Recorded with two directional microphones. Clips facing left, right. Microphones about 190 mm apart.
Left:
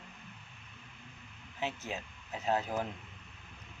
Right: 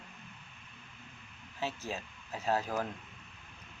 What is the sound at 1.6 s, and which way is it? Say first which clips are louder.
Speech: even; 20° left (ahead or behind).